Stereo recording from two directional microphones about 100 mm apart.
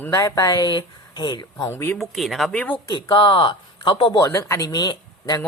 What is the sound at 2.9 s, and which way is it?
Speech, 50° left (ahead or behind).